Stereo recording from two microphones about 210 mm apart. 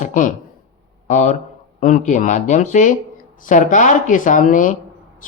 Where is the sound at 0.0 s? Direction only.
35° left (ahead or behind).